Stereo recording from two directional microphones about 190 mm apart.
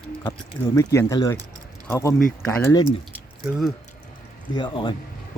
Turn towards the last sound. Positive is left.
turn(degrees=25)  # may be behind; listen again after turning